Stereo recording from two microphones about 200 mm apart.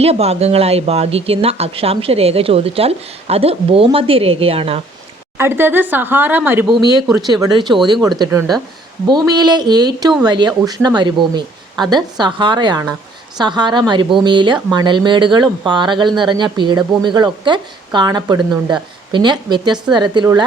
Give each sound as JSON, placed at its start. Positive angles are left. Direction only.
{"t": 0.0, "sound": "a woman's voice", "side_deg": -30}
{"t": 5.4, "sound": "speech", "side_deg": -10}
{"t": 7.4, "sound": "a woman's voice", "side_deg": -25}